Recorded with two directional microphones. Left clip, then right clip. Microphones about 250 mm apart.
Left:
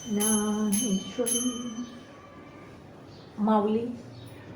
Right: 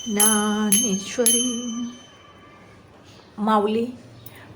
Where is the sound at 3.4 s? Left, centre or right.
Right.